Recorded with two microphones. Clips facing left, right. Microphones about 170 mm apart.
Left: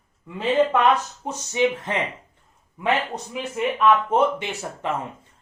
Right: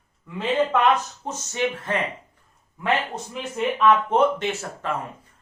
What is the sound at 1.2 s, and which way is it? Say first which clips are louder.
Speech: left 5 dB; 15° left (ahead or behind).